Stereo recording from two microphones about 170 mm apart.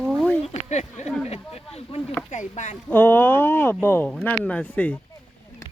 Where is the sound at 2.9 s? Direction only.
10° left (ahead or behind).